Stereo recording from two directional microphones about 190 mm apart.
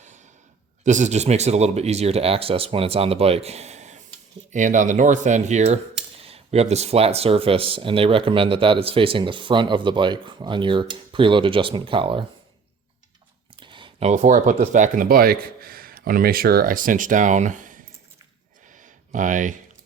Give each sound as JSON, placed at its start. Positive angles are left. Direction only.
{"t": 0.9, "sound": "speech", "side_deg": -40}
{"t": 13.6, "sound": "speech", "side_deg": -25}
{"t": 18.7, "sound": "a sound", "side_deg": -40}